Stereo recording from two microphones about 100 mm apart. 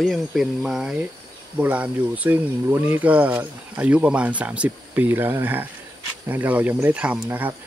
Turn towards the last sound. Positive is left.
turn(degrees=-15)  # may be behind; listen again after turning